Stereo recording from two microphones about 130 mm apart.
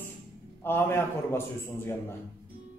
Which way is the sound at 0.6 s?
15° left (ahead or behind).